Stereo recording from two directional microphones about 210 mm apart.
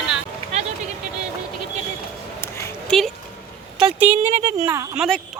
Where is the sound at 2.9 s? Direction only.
Centre (ahead or behind).